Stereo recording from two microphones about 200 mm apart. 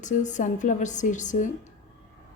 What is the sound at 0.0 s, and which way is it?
A woman's voice, 40° left (ahead or behind).